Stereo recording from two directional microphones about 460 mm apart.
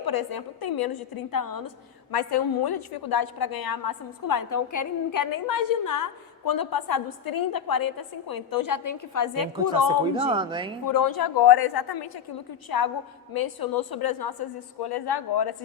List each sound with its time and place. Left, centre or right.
0.0 s a woman's voice: left
10.2 s speech: centre
10.8 s a woman's voice: left